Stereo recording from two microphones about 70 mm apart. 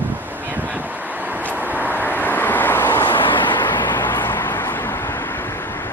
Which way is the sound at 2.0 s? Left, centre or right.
Left.